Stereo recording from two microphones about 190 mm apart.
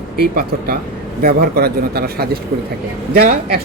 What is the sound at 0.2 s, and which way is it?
A man's voice, 50° right (ahead or behind).